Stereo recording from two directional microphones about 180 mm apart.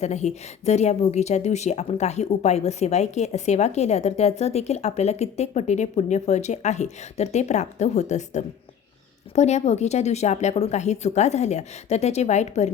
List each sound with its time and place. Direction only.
0.0 s speech: 40° left (ahead or behind)